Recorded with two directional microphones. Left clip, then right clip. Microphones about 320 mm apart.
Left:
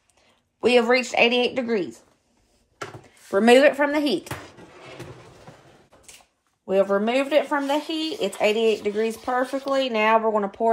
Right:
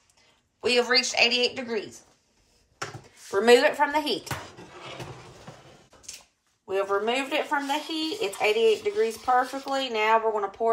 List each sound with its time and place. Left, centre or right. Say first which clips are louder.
0.6 s a woman's voice: left 4 dB; left
3.3 s speech: left 3 dB; left
6.7 s speech: left 5 dB; left